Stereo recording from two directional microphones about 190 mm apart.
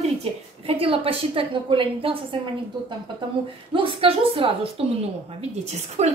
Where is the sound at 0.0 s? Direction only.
30° right (ahead or behind).